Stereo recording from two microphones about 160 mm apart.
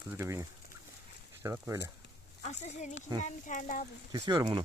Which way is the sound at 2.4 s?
45° left (ahead or behind).